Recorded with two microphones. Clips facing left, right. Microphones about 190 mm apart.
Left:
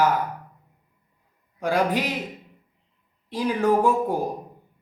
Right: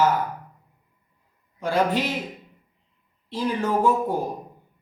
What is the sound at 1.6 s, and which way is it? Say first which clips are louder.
Speech: even; 15° left (ahead or behind).